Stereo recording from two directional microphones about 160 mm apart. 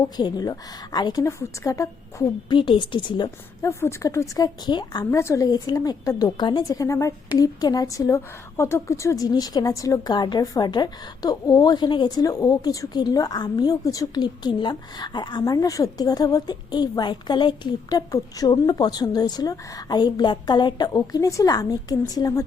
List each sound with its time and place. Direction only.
0.2 s a woman's voice: 25° left (ahead or behind)
2.5 s a woman's voice: 30° left (ahead or behind)
3.7 s a woman's voice: 15° left (ahead or behind)